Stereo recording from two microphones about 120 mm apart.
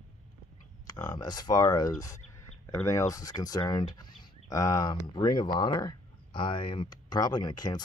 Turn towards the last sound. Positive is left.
turn(degrees=35)  # may be behind; listen again after turning